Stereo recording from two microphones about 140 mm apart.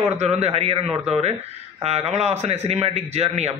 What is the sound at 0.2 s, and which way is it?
A man's voice, 45° right (ahead or behind).